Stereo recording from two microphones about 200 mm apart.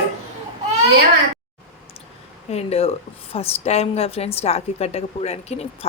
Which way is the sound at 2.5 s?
30° left (ahead or behind).